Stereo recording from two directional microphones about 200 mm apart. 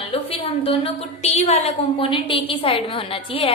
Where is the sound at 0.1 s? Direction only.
30° left (ahead or behind).